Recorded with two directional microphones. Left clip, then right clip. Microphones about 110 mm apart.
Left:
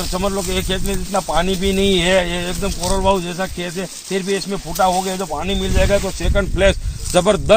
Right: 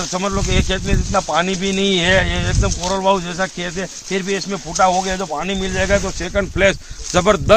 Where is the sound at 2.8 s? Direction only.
10° left (ahead or behind).